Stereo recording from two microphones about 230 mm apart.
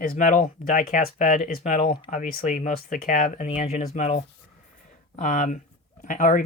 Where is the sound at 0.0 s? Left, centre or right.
Left.